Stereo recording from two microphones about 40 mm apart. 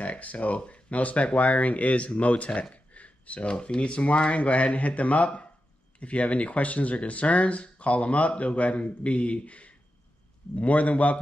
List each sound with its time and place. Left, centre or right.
0.0 s speech: left